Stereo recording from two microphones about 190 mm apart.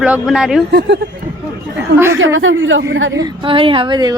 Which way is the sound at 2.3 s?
90° right.